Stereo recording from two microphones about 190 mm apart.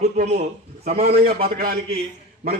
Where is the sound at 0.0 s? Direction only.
35° right (ahead or behind).